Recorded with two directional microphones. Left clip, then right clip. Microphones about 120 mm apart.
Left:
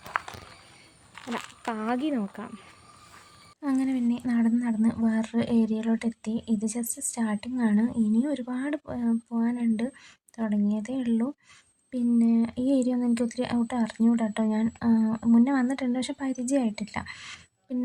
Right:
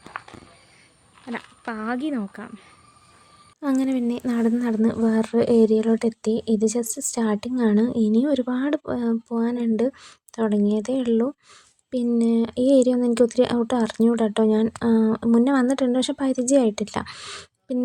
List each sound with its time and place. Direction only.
1.6 s speech: 35° right (ahead or behind)
3.6 s speech: 35° right (ahead or behind)
17.1 s speech: 20° right (ahead or behind)